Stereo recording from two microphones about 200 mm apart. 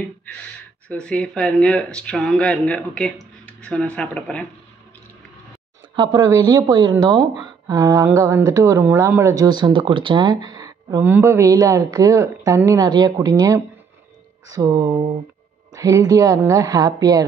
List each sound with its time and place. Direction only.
0.8 s speech: 5° left (ahead or behind)
5.9 s a woman's voice: 20° right (ahead or behind)